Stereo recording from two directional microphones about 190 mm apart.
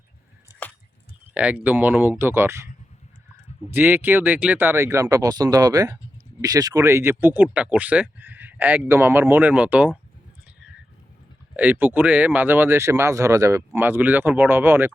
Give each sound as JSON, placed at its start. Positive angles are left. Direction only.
{"t": 1.3, "sound": "speech", "side_deg": -5}
{"t": 3.7, "sound": "speech", "side_deg": -10}
{"t": 11.5, "sound": "speech", "side_deg": -10}